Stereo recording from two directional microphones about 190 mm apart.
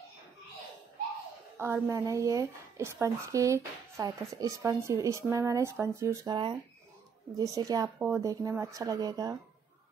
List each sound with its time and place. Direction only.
1.6 s a woman's voice: 15° right (ahead or behind)